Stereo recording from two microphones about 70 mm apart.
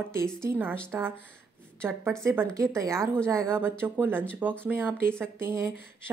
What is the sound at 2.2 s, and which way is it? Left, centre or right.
A woman's voice, right.